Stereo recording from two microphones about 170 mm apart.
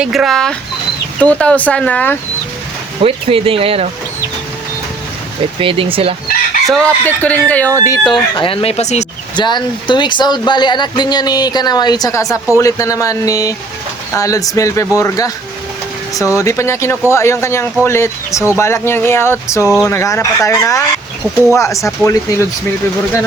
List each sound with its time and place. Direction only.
0.0 s speech: 5° right (ahead or behind)
3.0 s speech: 35° right (ahead or behind)
5.5 s speech: 30° right (ahead or behind)
6.7 s speech: 5° left (ahead or behind)
7.9 s speech: 25° left (ahead or behind); by 9.0 s 40° left (ahead or behind)
9.4 s speech: 25° left (ahead or behind)